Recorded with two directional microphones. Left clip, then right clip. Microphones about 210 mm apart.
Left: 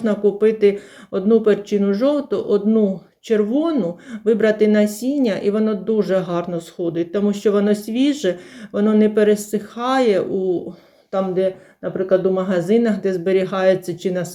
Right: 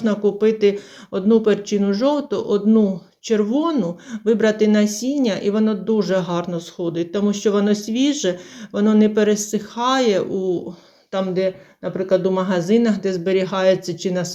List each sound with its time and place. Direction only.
0.0 s speech: centre (ahead or behind)